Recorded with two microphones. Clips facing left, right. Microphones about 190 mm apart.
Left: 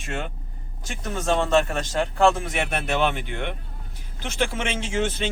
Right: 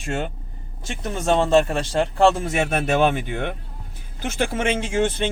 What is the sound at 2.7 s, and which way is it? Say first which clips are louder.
Speech: right 5 dB; 50° right (ahead or behind).